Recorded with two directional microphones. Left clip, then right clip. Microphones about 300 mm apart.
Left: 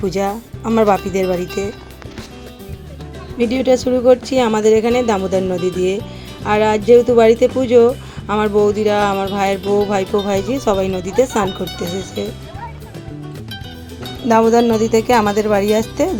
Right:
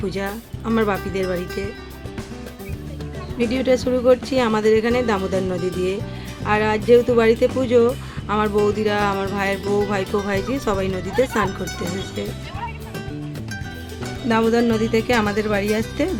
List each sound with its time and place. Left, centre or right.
0.1 s speech: centre
3.3 s speech: centre
14.0 s speech: centre